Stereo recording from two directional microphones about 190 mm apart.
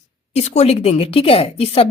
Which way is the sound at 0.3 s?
35° left (ahead or behind).